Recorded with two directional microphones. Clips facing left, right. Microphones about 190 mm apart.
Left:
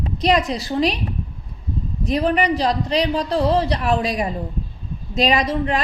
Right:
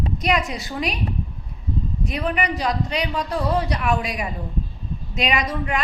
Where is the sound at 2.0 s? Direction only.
35° left (ahead or behind).